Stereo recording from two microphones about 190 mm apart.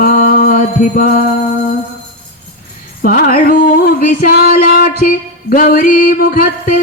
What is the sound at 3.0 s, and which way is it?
Music, 50° left (ahead or behind).